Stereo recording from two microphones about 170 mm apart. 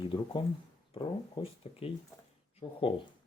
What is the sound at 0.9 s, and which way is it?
Speech, 35° left (ahead or behind).